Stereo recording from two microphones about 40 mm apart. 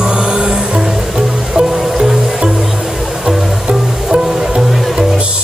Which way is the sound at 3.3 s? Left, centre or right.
Centre.